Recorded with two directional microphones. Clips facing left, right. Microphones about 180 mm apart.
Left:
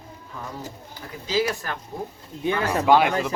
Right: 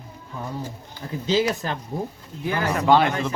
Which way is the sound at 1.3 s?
25° right (ahead or behind).